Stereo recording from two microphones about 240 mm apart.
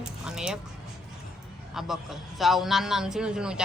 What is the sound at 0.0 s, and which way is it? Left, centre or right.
Keys jangling, centre.